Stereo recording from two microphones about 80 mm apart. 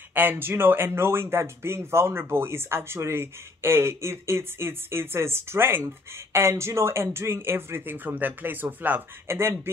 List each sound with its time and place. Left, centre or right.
0.1 s speech: right